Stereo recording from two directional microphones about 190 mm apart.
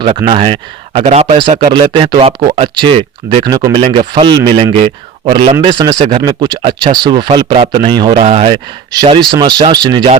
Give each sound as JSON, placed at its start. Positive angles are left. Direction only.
{"t": 0.3, "sound": "speech", "side_deg": -30}